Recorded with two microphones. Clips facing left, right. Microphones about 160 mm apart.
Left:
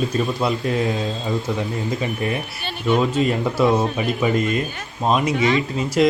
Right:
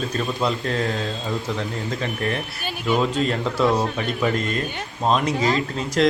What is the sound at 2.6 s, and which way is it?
Speech, 10° right (ahead or behind).